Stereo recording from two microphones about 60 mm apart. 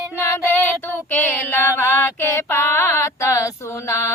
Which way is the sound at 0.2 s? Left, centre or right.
Left.